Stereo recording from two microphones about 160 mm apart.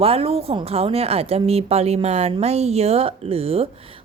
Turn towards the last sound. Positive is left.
turn(degrees=-35)  # may be behind; listen again after turning